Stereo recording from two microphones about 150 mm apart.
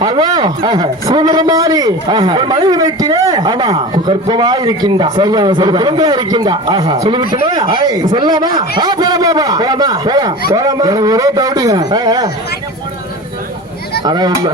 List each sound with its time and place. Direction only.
0.0 s a man's voice: 30° right (ahead or behind)
14.0 s a man's voice: 25° right (ahead or behind)